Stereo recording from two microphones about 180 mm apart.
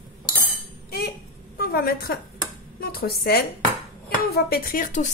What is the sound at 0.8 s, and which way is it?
Cutlery, 60° left (ahead or behind).